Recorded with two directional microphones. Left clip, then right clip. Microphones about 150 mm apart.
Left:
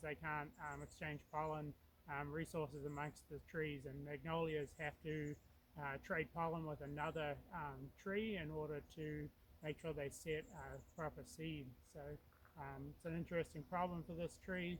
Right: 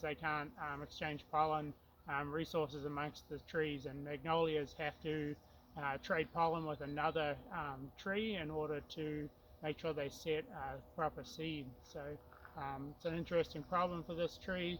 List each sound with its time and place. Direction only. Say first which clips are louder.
0.0 s a man's voice: right 6 dB; 10° left (ahead or behind)